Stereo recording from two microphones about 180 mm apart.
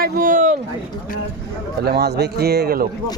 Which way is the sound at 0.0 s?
50° right (ahead or behind).